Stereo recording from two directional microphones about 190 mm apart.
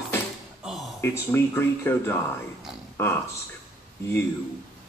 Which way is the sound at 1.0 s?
10° left (ahead or behind).